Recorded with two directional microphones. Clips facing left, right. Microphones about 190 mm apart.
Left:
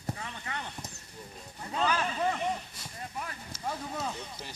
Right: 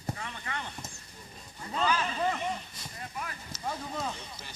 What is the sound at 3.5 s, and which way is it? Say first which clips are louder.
Speech: even; 5° left (ahead or behind).